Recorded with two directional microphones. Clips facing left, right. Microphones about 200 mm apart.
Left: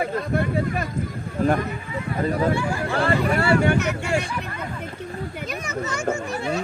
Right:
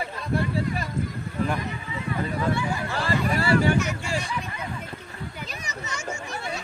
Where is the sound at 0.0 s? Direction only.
55° left (ahead or behind).